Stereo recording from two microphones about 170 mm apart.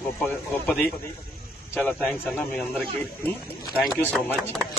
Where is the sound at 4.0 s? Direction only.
10° left (ahead or behind).